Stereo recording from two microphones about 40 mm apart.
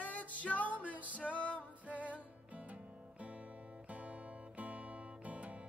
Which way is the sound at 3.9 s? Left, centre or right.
Right.